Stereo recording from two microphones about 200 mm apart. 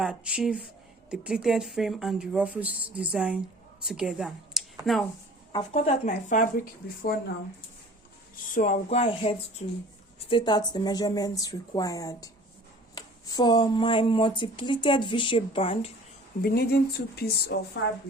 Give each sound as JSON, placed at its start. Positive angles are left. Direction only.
{"t": 0.0, "sound": "speech", "side_deg": -5}
{"t": 5.5, "sound": "speech", "side_deg": 25}
{"t": 8.5, "sound": "speech", "side_deg": 35}
{"t": 16.4, "sound": "speech", "side_deg": 50}
{"t": 17.5, "sound": "a woman's voice", "side_deg": 65}